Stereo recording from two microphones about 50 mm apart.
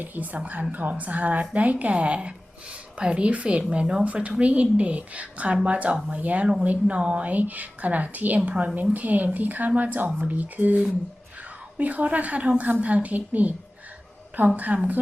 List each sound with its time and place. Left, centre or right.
0.0 s a woman's voice: right